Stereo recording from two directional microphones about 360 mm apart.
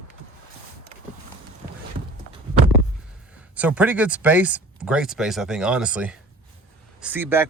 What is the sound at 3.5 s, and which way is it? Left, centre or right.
Speech, centre.